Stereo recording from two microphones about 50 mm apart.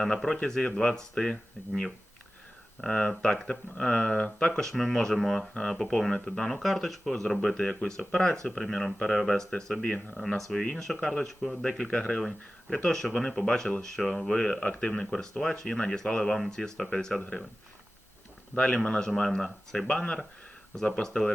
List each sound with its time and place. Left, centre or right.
0.0 s speech: centre
9.5 s speech: centre
10.2 s speech: centre
10.6 s speech: centre
11.2 s speech: centre
11.9 s speech: centre
14.3 s speech: left
15.1 s speech: centre
18.5 s speech: left